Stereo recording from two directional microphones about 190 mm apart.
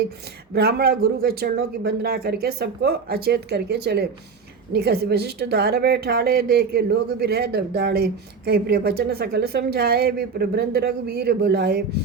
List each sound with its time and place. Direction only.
0.5 s a woman's voice: 60° right (ahead or behind)